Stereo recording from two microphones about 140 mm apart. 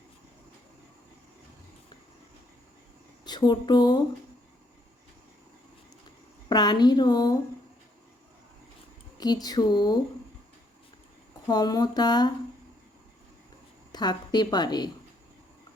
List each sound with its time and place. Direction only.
3.2 s speech: 30° left (ahead or behind)
6.5 s a woman's voice: 30° left (ahead or behind)
9.1 s a woman's voice: 30° left (ahead or behind)
11.4 s a woman's voice: 30° left (ahead or behind)
13.9 s a woman's voice: 30° left (ahead or behind)